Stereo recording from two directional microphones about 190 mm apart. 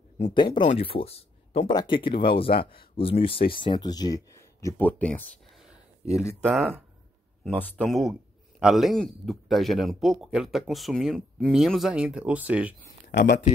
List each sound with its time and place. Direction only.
0.3 s speech: 25° left (ahead or behind)
3.3 s speech: 50° left (ahead or behind)
3.6 s speech: 20° left (ahead or behind)
6.1 s speech: 5° right (ahead or behind)
13.1 s speech: 65° left (ahead or behind)